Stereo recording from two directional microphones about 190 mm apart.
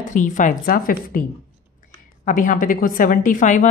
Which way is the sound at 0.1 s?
40° left (ahead or behind).